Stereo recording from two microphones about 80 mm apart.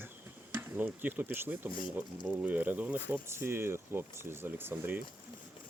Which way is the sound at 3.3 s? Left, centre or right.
Right.